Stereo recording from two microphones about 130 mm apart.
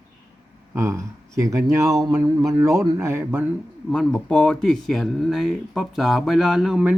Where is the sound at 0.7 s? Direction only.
20° right (ahead or behind).